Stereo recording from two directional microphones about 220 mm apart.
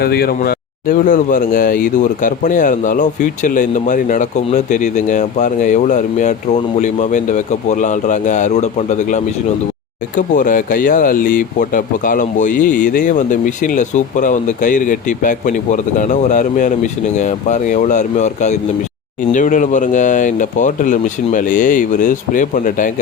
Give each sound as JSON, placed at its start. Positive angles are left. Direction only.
{"t": 0.0, "sound": "speech", "side_deg": 45}